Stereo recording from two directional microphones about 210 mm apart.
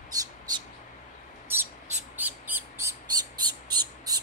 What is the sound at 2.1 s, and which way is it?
Bird, 10° right (ahead or behind).